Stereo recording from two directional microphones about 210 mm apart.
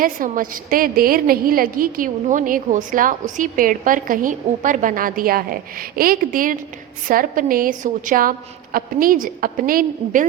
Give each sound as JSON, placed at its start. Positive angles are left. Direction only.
{"t": 0.0, "sound": "a woman's voice", "side_deg": -40}